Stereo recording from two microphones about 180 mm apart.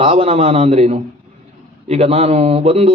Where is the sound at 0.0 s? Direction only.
35° right (ahead or behind).